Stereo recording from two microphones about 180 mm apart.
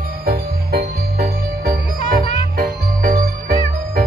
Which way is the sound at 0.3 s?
60° right (ahead or behind).